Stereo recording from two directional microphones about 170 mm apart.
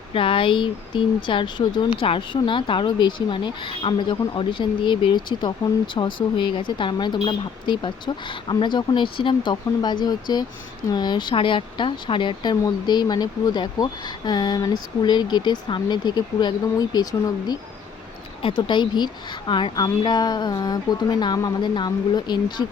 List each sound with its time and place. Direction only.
0.1 s speech: 30° left (ahead or behind)